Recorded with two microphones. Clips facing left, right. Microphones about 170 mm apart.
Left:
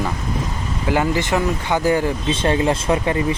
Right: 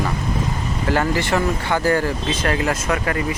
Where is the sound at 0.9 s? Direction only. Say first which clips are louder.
Left 1 dB; 15° left (ahead or behind).